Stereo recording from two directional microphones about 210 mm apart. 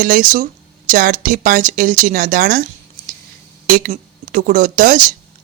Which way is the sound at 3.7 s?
40° right (ahead or behind).